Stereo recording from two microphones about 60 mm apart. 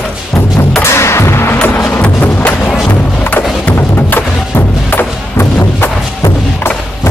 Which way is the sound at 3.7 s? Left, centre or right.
Left.